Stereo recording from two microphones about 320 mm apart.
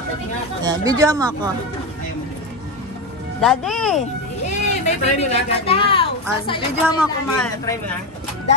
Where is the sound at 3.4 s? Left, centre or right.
Centre.